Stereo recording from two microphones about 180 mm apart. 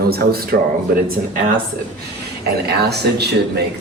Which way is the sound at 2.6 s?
65° right (ahead or behind).